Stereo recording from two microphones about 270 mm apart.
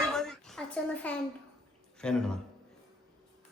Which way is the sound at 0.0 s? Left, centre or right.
Centre.